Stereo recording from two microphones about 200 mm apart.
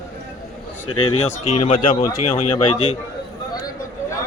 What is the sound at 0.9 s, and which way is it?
Speech, 90° left.